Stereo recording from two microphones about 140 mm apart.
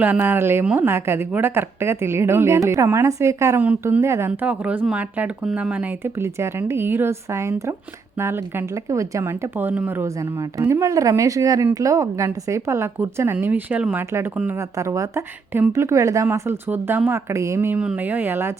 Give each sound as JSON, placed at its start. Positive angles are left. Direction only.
{"t": 0.0, "sound": "a woman's voice", "side_deg": -15}